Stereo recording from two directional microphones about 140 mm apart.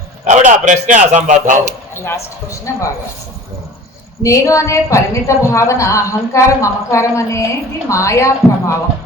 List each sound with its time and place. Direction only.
0.3 s a man's voice: 60° right (ahead or behind)
2.0 s a woman's voice: 20° left (ahead or behind)
4.2 s a woman's voice: 20° left (ahead or behind)